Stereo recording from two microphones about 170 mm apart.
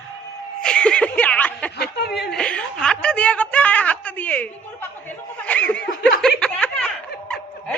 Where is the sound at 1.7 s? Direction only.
70° left (ahead or behind).